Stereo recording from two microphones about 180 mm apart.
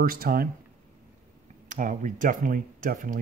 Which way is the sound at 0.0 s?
55° right (ahead or behind).